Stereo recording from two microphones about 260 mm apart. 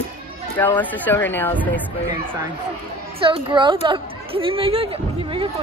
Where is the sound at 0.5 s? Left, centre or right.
Centre.